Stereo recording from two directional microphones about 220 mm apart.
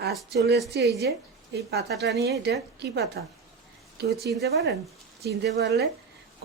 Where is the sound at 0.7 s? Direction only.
45° right (ahead or behind).